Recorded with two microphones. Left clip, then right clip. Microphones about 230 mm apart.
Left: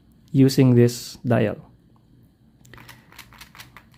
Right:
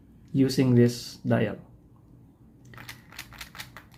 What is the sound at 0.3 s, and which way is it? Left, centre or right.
Speech, left.